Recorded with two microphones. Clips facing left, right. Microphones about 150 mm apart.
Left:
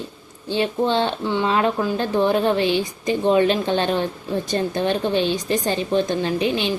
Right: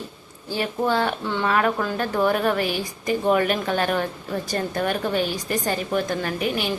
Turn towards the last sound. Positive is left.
turn(degrees=25)  # may be behind; listen again after turning